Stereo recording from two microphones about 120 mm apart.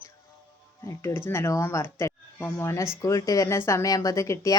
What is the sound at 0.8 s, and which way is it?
Speech, 25° left (ahead or behind).